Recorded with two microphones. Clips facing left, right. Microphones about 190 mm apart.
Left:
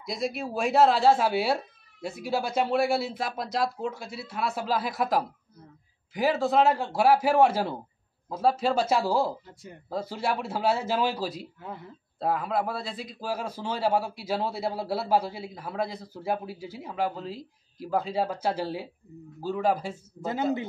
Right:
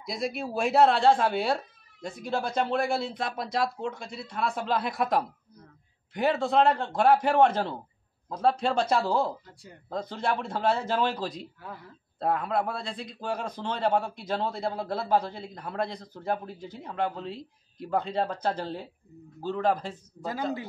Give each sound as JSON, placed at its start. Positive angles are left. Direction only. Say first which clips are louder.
{"t": 0.0, "sound": "a man's voice", "louder": "left 1 dB", "side_deg": 0}
{"t": 11.6, "sound": "speech", "louder": "left 3 dB", "side_deg": 20}
{"t": 12.2, "sound": "a man's voice", "louder": "even", "side_deg": 0}
{"t": 20.2, "sound": "speech", "louder": "left 3 dB", "side_deg": 20}